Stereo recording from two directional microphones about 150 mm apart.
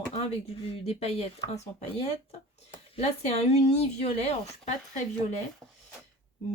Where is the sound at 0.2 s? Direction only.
45° left (ahead or behind).